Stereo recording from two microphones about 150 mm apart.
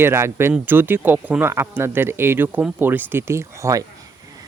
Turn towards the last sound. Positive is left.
turn(degrees=-20)  # may be behind; listen again after turning